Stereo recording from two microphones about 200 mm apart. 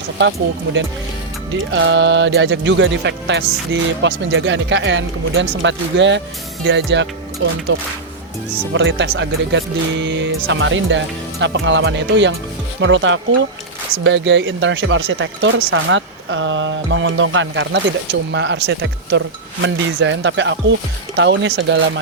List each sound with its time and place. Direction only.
0.2 s speech: 65° right (ahead or behind)
8.7 s speech: 65° right (ahead or behind)